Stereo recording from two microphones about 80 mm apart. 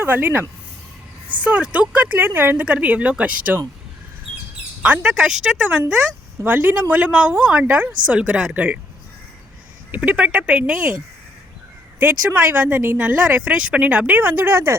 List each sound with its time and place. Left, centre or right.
0.0 s speech: right
4.8 s a woman's voice: centre
6.4 s a woman's voice: right
9.9 s speech: centre
11.9 s speech: right